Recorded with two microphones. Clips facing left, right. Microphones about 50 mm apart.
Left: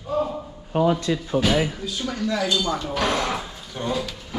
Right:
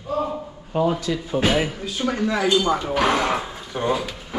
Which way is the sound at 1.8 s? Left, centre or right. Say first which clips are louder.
Right 3 dB; right.